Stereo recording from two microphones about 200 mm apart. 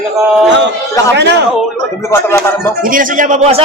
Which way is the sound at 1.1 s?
60° right (ahead or behind).